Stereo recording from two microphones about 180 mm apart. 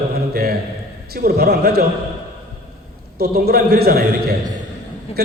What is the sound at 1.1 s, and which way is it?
Speech, 60° right (ahead or behind).